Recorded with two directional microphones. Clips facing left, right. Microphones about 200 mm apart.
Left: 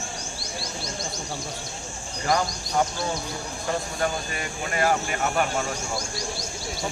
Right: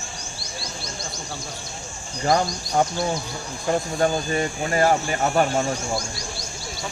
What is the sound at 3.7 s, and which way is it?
Speech, 30° right (ahead or behind).